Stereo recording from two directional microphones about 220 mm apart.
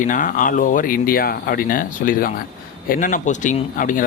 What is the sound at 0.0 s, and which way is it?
Speech, 35° left (ahead or behind).